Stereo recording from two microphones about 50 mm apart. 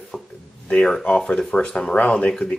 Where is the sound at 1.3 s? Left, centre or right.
Centre.